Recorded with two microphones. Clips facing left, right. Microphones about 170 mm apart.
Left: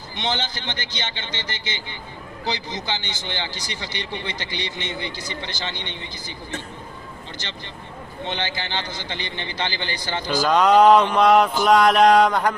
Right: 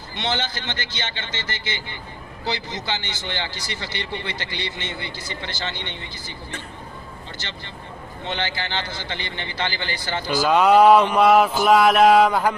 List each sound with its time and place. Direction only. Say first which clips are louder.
0.2 s speech: right 1 dB; 15° left (ahead or behind)
8.2 s speech: even; 15° left (ahead or behind)
10.2 s speech: right 1 dB; 10° right (ahead or behind)
11.6 s a sound: right 1 dB; 5° right (ahead or behind)